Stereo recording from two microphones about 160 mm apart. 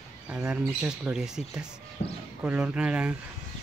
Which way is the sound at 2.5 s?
10° right (ahead or behind).